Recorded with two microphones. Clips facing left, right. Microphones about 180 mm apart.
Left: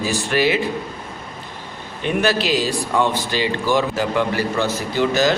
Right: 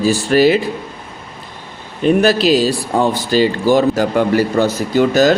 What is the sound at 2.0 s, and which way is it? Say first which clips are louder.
A man's voice: right 7 dB; 35° right (ahead or behind).